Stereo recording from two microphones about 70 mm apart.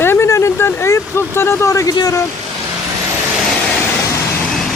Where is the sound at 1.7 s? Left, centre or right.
Left.